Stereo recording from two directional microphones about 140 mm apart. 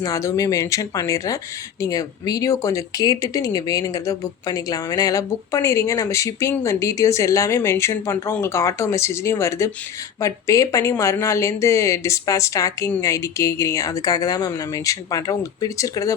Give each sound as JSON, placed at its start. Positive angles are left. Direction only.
{"t": 0.0, "sound": "speech", "side_deg": 25}